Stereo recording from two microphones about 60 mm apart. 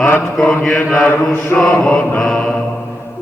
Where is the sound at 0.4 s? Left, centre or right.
Centre.